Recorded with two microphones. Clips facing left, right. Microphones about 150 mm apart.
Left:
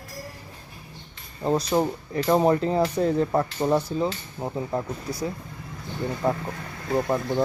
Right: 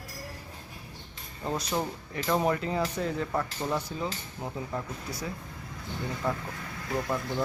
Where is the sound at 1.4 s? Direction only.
35° left (ahead or behind).